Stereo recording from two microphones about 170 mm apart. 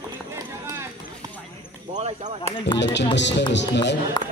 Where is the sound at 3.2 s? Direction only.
90° left.